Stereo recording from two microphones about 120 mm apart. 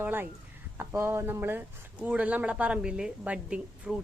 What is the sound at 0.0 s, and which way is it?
Speech, 15° right (ahead or behind).